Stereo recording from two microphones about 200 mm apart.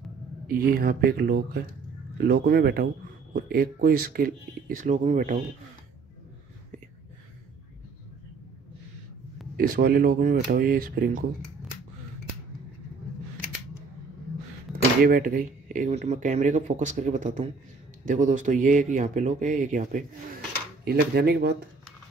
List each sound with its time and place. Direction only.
0.5 s speech: 45° right (ahead or behind)
9.6 s speech: 50° right (ahead or behind)
15.0 s speech: 45° right (ahead or behind)
20.8 s speech: 55° right (ahead or behind)